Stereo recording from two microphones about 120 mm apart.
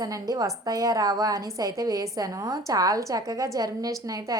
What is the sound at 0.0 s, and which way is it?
A woman's voice, 30° right (ahead or behind).